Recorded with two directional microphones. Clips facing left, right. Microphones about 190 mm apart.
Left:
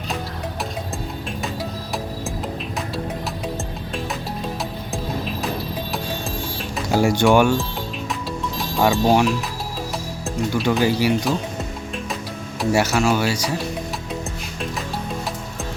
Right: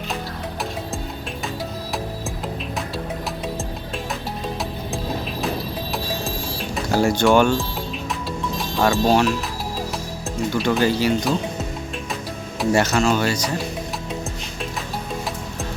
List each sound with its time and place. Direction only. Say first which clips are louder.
6.8 s speech: left 1 dB; 15° left (ahead or behind)
8.8 s speech: left 1 dB; 15° left (ahead or behind)
10.8 s speech: even; 15° left (ahead or behind)
12.5 s speech: even; 10° left (ahead or behind)